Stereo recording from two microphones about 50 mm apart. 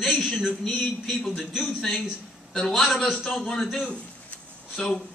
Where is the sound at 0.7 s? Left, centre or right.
Centre.